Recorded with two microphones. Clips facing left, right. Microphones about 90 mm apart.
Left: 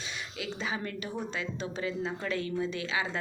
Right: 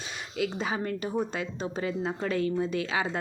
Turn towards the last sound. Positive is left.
turn(degrees=-40)  # may be behind; listen again after turning